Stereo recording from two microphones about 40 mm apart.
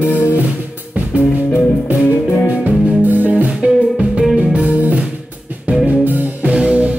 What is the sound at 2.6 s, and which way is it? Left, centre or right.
Music, right.